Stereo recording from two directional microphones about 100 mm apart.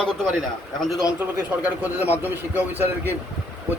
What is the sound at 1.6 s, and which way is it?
Speech, 20° right (ahead or behind).